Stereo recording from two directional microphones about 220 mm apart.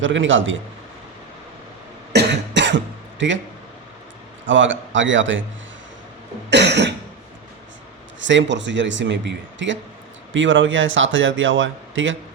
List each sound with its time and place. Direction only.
0.0 s speech: 60° right (ahead or behind)
2.1 s cough: 50° right (ahead or behind)
4.4 s speech: 60° right (ahead or behind)
6.5 s cough: 50° right (ahead or behind)
8.2 s speech: 55° right (ahead or behind)